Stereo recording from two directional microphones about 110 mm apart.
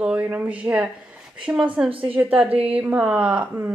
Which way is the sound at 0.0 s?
15° right (ahead or behind).